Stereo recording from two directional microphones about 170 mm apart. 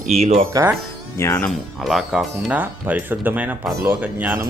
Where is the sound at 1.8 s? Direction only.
Centre (ahead or behind).